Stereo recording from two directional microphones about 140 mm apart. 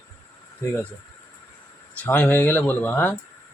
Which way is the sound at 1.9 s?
10° left (ahead or behind).